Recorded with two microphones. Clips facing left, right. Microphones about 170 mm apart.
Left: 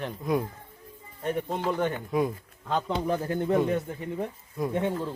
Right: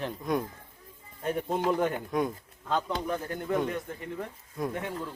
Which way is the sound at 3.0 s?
30° left (ahead or behind).